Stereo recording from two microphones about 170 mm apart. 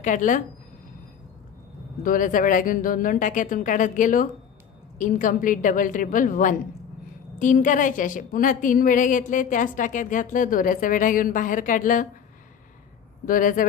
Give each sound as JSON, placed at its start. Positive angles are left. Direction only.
{"t": 0.0, "sound": "a woman's voice", "side_deg": 50}
{"t": 2.0, "sound": "a woman's voice", "side_deg": 50}
{"t": 13.2, "sound": "a woman's voice", "side_deg": 55}